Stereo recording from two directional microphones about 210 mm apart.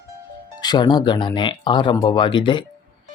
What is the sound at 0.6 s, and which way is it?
Speech, 20° left (ahead or behind).